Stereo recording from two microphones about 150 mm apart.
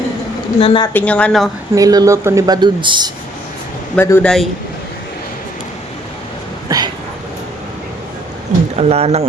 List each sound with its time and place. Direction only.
0.6 s speech: 35° left (ahead or behind)
0.9 s speech: 10° left (ahead or behind)
1.7 s a woman's voice: 25° right (ahead or behind)
3.9 s speech: 15° left (ahead or behind)
6.7 s a woman's voice: 25° right (ahead or behind)
8.8 s speech: 45° right (ahead or behind)